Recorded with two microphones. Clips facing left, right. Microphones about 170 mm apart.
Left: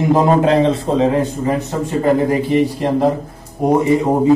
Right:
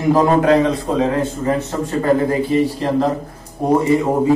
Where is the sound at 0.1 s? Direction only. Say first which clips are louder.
Right 1 dB; 25° left (ahead or behind).